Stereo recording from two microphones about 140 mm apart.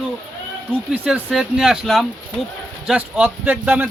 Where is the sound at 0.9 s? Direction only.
5° right (ahead or behind).